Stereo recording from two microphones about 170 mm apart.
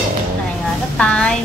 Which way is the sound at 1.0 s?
5° left (ahead or behind).